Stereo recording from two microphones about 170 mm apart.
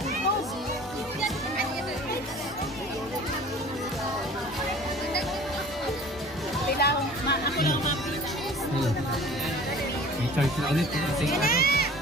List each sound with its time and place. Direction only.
6.8 s music: 75° left (ahead or behind)
10.4 s speech: centre (ahead or behind)
11.4 s speech: 65° left (ahead or behind)